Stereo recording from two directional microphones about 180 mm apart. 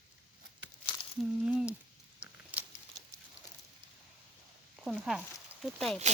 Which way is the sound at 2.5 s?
10° right (ahead or behind).